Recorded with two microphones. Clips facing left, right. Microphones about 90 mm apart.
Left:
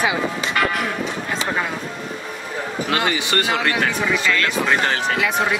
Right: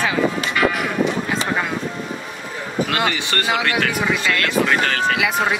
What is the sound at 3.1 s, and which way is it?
Speech, 20° left (ahead or behind).